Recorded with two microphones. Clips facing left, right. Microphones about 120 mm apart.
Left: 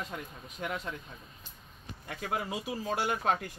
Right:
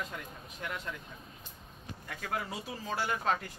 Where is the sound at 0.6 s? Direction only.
25° left (ahead or behind).